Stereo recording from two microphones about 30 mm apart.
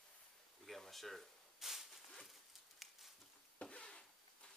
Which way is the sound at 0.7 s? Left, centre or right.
Centre.